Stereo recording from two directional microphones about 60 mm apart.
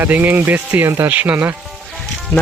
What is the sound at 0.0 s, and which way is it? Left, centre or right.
Speech, right.